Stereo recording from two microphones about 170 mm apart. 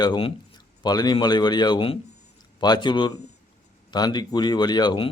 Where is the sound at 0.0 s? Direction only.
30° left (ahead or behind).